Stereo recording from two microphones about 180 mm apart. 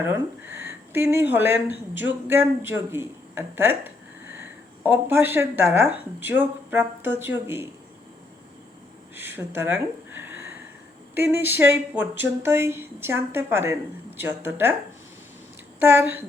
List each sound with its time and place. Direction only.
0.0 s speech: 10° right (ahead or behind)
9.1 s speech: 10° right (ahead or behind)
15.8 s speech: 10° right (ahead or behind)